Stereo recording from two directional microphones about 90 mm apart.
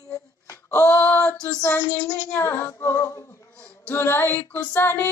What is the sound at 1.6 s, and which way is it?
Female singing, 25° left (ahead or behind).